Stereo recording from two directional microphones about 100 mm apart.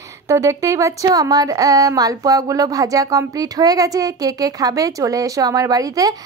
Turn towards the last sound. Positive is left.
turn(degrees=-40)  # may be behind; listen again after turning